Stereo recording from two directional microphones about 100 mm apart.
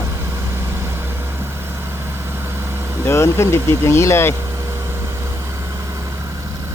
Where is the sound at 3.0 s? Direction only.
25° left (ahead or behind).